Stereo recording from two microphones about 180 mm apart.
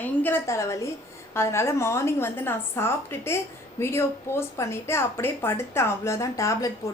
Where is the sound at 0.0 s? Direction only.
10° left (ahead or behind).